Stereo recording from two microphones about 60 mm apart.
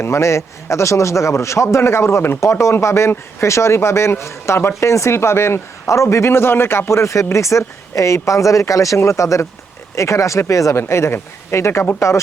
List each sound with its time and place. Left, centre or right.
0.0 s a man's voice: left